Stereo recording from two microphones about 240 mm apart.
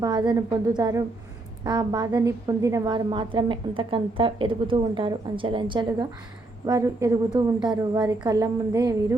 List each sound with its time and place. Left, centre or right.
0.0 s a woman's voice: centre